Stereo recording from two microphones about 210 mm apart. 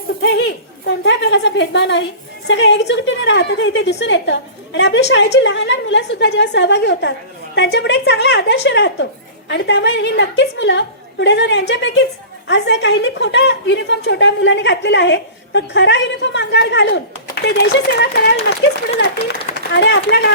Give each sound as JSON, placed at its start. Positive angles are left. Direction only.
{"t": 0.2, "sound": "a woman's voice", "side_deg": 55}
{"t": 19.0, "sound": "a woman's voice", "side_deg": 60}